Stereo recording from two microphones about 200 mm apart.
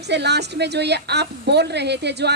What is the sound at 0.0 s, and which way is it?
A woman's voice, 55° right (ahead or behind).